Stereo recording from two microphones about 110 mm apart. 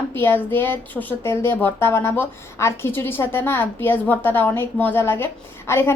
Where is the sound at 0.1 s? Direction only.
20° left (ahead or behind).